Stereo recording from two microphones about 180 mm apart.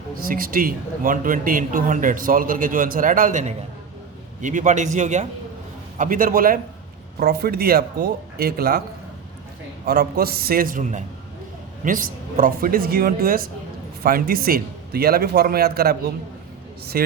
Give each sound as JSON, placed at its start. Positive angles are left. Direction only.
{"t": 0.2, "sound": "a man's voice", "side_deg": -55}
{"t": 9.8, "sound": "a man's voice", "side_deg": -60}